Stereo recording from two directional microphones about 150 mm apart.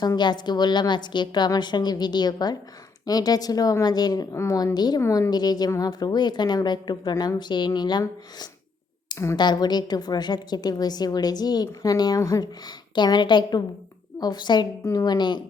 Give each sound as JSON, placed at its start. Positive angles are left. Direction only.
{"t": 0.0, "sound": "a woman's voice", "side_deg": 30}
{"t": 9.0, "sound": "a sound", "side_deg": 25}
{"t": 9.4, "sound": "a woman's voice", "side_deg": 30}